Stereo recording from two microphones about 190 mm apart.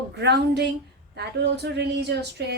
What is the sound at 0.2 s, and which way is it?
A woman's voice, 60° right (ahead or behind).